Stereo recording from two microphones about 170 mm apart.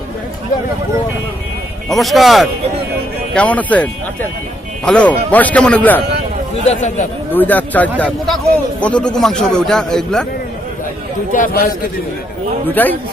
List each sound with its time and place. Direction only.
1.9 s a man's voice: centre (ahead or behind)
4.9 s speech: 10° left (ahead or behind)
6.7 s speech: 40° left (ahead or behind)
7.3 s a man's voice: 10° left (ahead or behind)
11.3 s a man's voice: 55° left (ahead or behind)
12.6 s speech: 10° left (ahead or behind)